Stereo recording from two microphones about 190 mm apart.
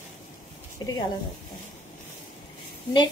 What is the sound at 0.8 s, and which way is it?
Speech, 20° left (ahead or behind).